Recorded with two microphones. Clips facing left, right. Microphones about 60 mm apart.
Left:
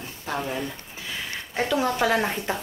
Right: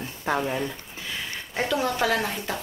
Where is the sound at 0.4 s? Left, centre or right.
Centre.